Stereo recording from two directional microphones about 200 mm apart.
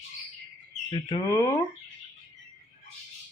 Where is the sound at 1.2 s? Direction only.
15° left (ahead or behind).